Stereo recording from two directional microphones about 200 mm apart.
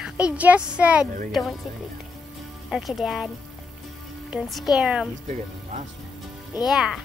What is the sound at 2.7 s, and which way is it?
Speech, centre (ahead or behind).